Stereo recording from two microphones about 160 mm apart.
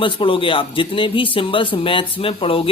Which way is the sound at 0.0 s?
35° left (ahead or behind).